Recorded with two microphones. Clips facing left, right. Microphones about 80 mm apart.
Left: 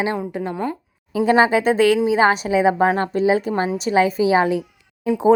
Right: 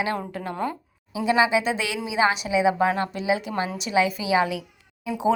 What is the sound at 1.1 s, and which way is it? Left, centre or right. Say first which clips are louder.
A woman's voice: left 5 dB; left.